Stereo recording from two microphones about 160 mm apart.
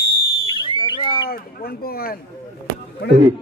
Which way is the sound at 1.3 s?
70° left (ahead or behind).